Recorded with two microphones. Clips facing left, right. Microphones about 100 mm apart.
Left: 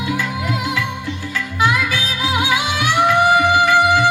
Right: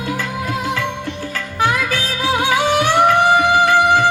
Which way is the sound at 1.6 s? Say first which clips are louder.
Even; 45° right (ahead or behind).